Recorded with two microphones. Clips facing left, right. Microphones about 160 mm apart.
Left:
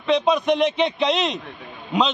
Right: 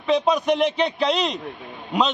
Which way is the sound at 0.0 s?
5° right (ahead or behind).